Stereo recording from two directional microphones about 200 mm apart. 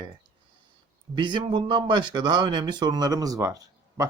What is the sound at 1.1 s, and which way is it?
Speech, 20° right (ahead or behind).